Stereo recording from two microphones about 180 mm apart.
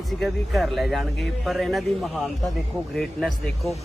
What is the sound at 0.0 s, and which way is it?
A man's voice, centre (ahead or behind).